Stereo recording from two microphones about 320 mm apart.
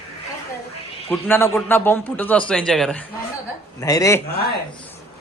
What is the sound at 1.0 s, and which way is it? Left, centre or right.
A man's voice, centre.